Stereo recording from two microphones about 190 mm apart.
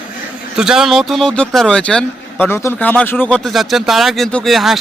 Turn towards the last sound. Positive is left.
turn(degrees=0)  # may be behind; listen again after turning